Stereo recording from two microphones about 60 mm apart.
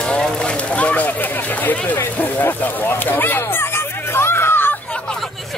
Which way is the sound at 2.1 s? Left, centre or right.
Left.